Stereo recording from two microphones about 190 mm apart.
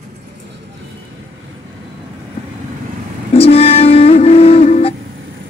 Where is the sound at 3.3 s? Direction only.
30° left (ahead or behind).